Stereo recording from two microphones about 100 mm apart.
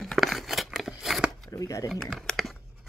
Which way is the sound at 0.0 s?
Centre (ahead or behind).